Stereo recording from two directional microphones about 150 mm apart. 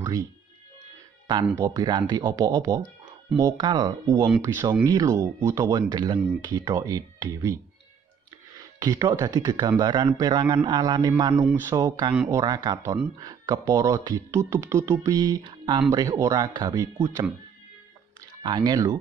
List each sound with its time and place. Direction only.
1.2 s speech: 25° right (ahead or behind)
4.0 s speech: 20° right (ahead or behind)
8.7 s speech: 25° right (ahead or behind)
12.1 s speech: 10° right (ahead or behind)
12.4 s speech: 30° right (ahead or behind)
18.4 s speech: 30° right (ahead or behind)